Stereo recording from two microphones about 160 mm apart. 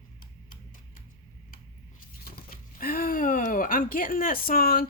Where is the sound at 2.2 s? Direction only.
65° left (ahead or behind).